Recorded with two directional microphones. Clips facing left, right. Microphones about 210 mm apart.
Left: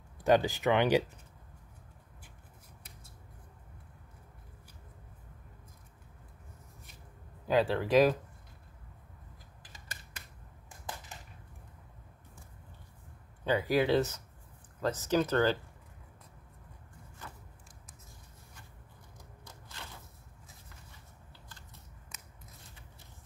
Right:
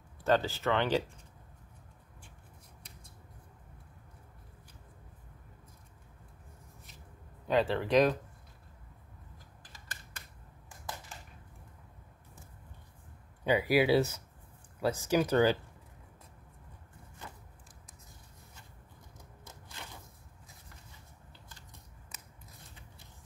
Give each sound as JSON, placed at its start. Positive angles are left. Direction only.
{"t": 0.2, "sound": "speech", "side_deg": 15}
{"t": 7.4, "sound": "speech", "side_deg": 0}
{"t": 13.4, "sound": "speech", "side_deg": -10}
{"t": 19.4, "sound": "crushing", "side_deg": -15}